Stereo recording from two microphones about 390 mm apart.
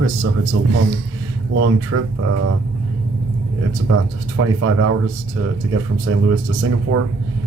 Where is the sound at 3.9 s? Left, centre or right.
Right.